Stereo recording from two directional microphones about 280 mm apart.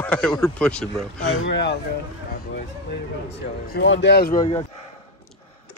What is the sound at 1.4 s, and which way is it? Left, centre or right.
Speech, left.